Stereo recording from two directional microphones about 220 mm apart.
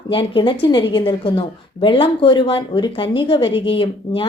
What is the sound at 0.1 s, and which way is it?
Speech, 25° left (ahead or behind).